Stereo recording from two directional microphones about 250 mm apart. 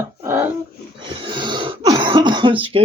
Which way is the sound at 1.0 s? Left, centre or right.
Centre.